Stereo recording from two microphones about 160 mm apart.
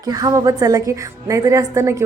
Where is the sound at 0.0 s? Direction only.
25° right (ahead or behind).